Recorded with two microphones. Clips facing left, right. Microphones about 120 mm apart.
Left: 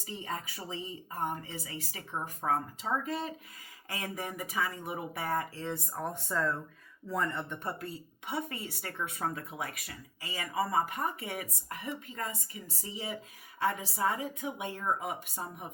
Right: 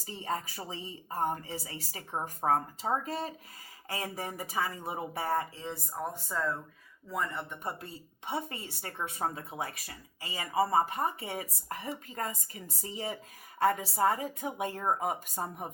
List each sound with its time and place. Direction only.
0.0 s a woman's voice: 35° right (ahead or behind)
5.5 s speech: 10° right (ahead or behind)
7.6 s a woman's voice: 20° right (ahead or behind); by 15.7 s 45° right (ahead or behind)